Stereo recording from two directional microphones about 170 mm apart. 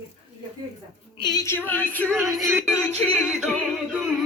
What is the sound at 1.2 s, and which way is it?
Female singing, 20° left (ahead or behind).